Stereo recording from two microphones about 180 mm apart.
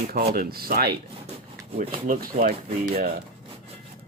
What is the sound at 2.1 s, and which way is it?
Speech, 50° right (ahead or behind).